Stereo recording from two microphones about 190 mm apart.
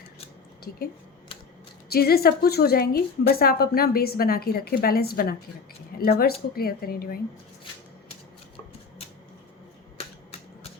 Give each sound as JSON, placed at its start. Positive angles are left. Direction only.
{"t": 1.9, "sound": "a woman's voice", "side_deg": 55}